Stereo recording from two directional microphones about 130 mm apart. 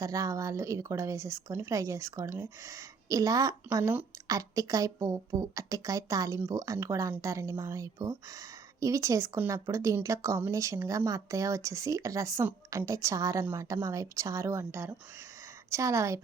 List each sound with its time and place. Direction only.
0.0 s speech: 25° right (ahead or behind)